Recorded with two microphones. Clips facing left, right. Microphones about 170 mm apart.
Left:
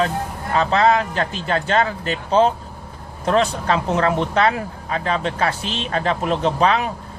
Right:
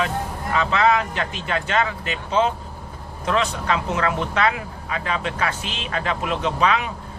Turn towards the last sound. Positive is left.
turn(degrees=35)  # may be behind; listen again after turning